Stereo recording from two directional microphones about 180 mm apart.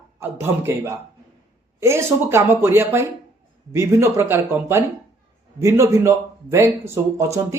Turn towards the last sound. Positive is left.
turn(degrees=-15)  # may be behind; listen again after turning